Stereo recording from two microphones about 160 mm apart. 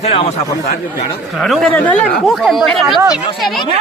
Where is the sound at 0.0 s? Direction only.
40° left (ahead or behind).